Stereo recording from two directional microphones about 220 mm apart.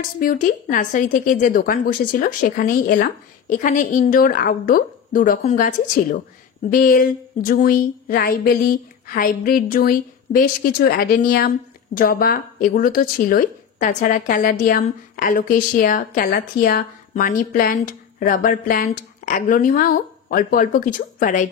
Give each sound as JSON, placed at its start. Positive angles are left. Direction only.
{"t": 0.2, "sound": "a woman's voice", "side_deg": 40}